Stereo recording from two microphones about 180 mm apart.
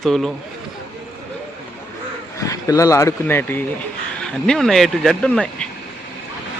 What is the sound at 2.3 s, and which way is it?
Speech, 20° left (ahead or behind).